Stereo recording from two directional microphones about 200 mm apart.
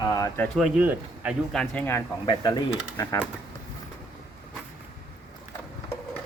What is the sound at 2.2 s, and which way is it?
Speech, 20° left (ahead or behind).